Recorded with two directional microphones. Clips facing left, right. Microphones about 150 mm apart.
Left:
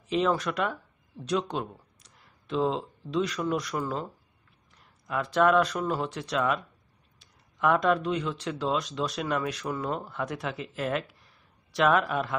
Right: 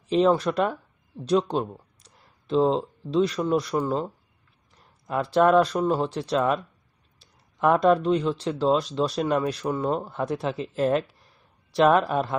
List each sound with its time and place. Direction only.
0.1 s speech: 30° right (ahead or behind)